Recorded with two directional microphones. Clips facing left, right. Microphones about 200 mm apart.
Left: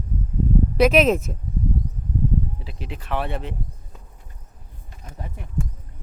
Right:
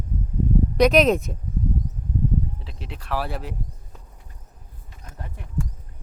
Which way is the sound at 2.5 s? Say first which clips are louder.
Left 3 dB; centre (ahead or behind).